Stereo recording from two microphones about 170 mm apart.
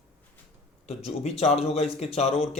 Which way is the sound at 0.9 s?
35° left (ahead or behind).